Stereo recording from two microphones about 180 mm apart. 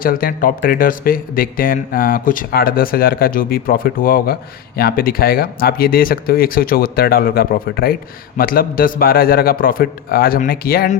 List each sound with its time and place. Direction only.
0.0 s speech: 55° left (ahead or behind)